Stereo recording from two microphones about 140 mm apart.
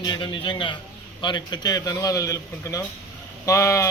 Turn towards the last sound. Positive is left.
turn(degrees=20)  # may be behind; listen again after turning